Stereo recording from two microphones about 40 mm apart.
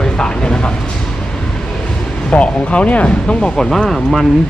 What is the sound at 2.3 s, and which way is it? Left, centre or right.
Speech, left.